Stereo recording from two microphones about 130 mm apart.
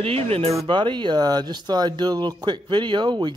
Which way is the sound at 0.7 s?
35° right (ahead or behind).